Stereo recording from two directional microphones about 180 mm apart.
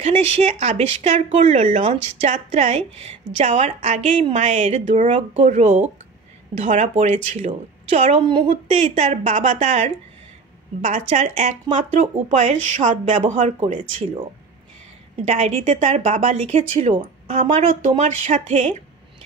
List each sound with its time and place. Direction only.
0.0 s speech: 35° right (ahead or behind)
15.2 s speech: 35° right (ahead or behind)